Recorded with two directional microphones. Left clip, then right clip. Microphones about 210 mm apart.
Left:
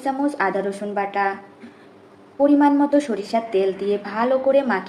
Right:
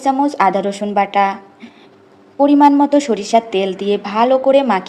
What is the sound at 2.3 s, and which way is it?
A woman's voice, 45° right (ahead or behind).